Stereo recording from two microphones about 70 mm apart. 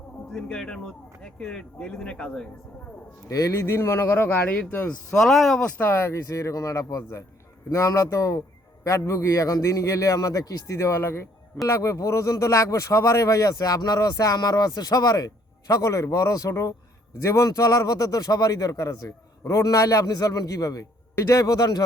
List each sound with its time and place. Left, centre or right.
0.3 s speech: centre
3.2 s speech: left
5.1 s speech: centre
5.6 s speech: left
5.9 s speech: left
21.2 s speech: left